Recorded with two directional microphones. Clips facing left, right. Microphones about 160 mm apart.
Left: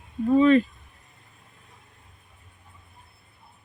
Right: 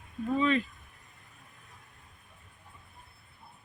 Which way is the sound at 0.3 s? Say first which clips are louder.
Left 10 dB; 45° left (ahead or behind).